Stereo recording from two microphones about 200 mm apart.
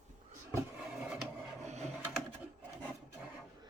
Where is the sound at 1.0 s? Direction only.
5° right (ahead or behind).